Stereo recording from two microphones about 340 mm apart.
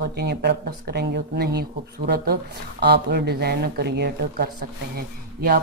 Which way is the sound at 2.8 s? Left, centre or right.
Right.